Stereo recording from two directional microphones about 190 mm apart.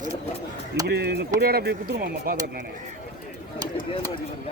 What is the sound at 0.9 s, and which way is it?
Speech, 60° right (ahead or behind).